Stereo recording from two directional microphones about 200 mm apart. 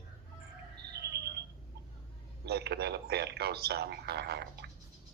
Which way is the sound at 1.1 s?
55° right (ahead or behind).